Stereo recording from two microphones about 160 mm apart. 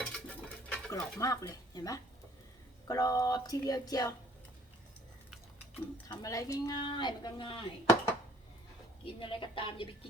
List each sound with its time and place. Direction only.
0.0 s stir: 5° left (ahead or behind)
0.7 s stir: 20° left (ahead or behind)
1.2 s speech: 20° left (ahead or behind)
6.1 s speech: 20° left (ahead or behind)
9.0 s a woman's voice: 30° left (ahead or behind)